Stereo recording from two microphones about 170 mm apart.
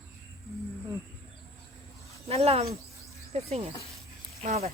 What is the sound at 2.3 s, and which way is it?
Speech, 35° right (ahead or behind).